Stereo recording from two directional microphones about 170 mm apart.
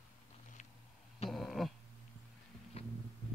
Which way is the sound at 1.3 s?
Centre (ahead or behind).